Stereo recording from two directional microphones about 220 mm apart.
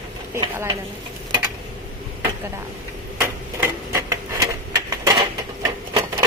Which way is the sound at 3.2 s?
10° right (ahead or behind).